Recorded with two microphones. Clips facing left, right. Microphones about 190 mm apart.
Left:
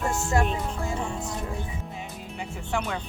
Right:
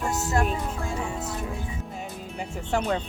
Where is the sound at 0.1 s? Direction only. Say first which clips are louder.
Right 1 dB; 5° right (ahead or behind).